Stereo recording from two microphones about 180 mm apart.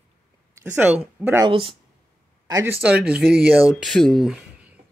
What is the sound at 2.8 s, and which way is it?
Speech, 5° right (ahead or behind).